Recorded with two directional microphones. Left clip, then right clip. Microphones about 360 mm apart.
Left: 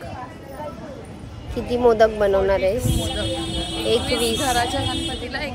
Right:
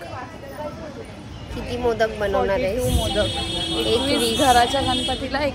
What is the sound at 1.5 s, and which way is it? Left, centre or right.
Speech, centre.